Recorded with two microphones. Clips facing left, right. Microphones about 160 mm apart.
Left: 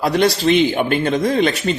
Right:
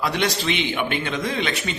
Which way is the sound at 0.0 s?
40° left (ahead or behind).